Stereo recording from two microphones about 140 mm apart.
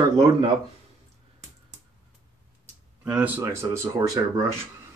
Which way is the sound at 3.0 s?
10° right (ahead or behind).